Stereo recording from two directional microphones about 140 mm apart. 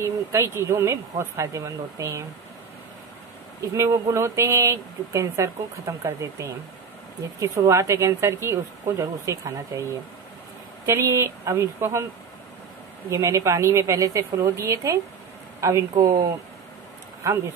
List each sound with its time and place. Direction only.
0.0 s speech: 20° right (ahead or behind)
3.6 s speech: 20° right (ahead or behind)
10.9 s speech: 20° right (ahead or behind)
13.1 s speech: 20° right (ahead or behind)
17.2 s speech: 20° right (ahead or behind)